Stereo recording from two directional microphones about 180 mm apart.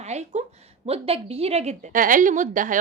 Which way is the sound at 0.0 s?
40° right (ahead or behind).